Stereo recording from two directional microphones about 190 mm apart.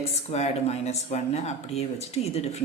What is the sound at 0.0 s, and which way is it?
Speech, 35° left (ahead or behind).